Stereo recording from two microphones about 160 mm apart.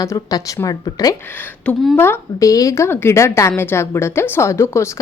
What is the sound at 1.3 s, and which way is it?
A woman's voice, 10° left (ahead or behind).